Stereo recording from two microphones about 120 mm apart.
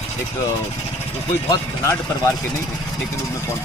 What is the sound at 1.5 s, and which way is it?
Speech, 25° left (ahead or behind).